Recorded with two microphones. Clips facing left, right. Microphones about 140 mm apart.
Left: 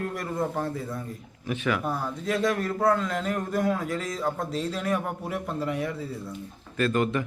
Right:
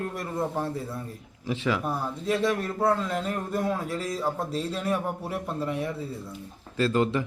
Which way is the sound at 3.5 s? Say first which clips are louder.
Left 2 dB; 25° right (ahead or behind).